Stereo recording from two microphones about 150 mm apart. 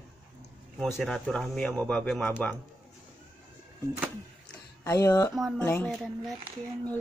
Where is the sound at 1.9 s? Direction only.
5° left (ahead or behind).